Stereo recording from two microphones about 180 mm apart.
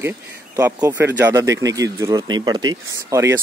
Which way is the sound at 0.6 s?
15° right (ahead or behind).